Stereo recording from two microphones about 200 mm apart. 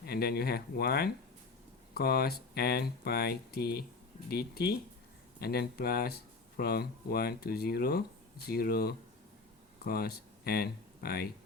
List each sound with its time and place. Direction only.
0.0 s speech: 50° left (ahead or behind)